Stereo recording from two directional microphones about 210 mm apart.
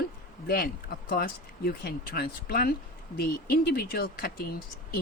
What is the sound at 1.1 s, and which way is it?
Speech, 45° left (ahead or behind).